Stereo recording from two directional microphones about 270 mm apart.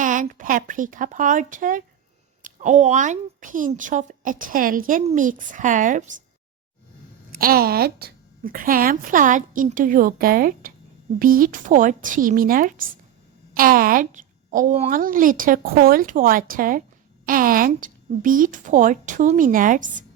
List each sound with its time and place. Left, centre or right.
0.0 s a woman's voice: right
7.3 s a woman's voice: right